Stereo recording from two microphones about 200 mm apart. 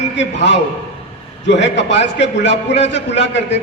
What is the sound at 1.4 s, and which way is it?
A man's voice, 65° left (ahead or behind).